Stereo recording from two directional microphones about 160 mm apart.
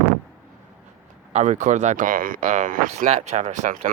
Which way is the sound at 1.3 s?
45° right (ahead or behind).